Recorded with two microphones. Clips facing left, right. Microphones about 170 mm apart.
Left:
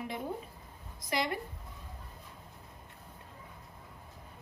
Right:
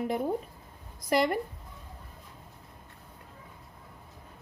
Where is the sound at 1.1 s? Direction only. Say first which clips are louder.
Right 8 dB; 55° right (ahead or behind).